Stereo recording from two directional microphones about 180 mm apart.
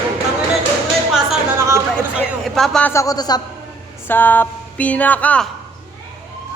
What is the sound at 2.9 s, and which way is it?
Speech, 20° left (ahead or behind).